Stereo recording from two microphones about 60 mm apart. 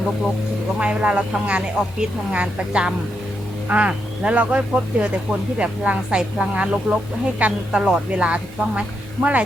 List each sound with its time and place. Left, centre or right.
0.8 s speech: centre